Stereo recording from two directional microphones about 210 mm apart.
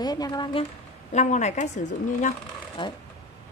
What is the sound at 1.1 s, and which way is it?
A woman's voice, 35° left (ahead or behind).